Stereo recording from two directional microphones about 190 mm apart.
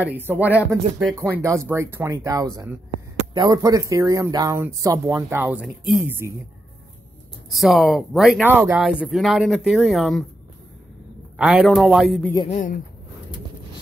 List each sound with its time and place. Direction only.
0.0 s speech: 10° right (ahead or behind)
7.4 s speech: centre (ahead or behind)
11.3 s speech: 5° right (ahead or behind)
12.4 s speech: 40° left (ahead or behind)